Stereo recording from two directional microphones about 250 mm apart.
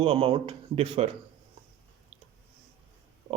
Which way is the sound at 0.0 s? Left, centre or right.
Right.